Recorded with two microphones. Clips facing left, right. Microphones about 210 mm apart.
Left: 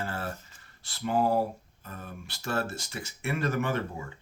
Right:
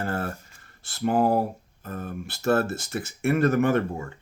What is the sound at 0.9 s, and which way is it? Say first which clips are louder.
Speech: right 5 dB; 50° right (ahead or behind).